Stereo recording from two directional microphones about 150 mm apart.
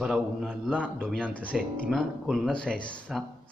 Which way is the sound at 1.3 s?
10° left (ahead or behind).